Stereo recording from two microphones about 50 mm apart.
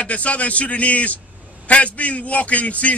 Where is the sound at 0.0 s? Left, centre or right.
Left.